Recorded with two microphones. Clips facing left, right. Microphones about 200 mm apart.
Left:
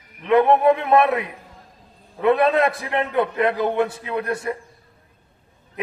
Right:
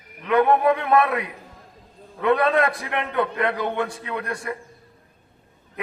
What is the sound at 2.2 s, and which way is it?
A man's voice, 25° left (ahead or behind).